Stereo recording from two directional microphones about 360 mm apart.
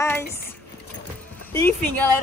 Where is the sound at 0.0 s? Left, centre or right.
Centre.